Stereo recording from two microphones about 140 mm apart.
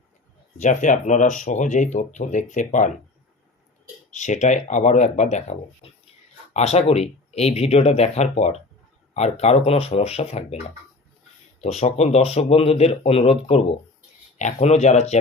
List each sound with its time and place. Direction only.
0.6 s speech: 65° left (ahead or behind)
4.1 s speech: 60° left (ahead or behind)
11.6 s speech: 50° left (ahead or behind)
14.3 s speech: 55° left (ahead or behind)